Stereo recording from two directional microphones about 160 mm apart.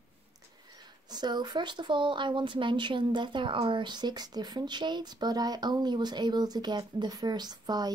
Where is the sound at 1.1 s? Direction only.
25° right (ahead or behind).